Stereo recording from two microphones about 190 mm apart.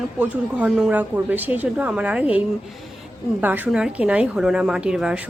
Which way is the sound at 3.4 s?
10° right (ahead or behind).